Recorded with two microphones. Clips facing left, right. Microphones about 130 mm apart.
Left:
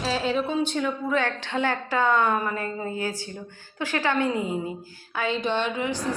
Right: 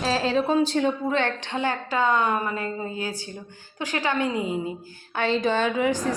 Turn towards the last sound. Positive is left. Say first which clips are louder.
# right 4 dB
turn(degrees=-45)  # may be behind; listen again after turning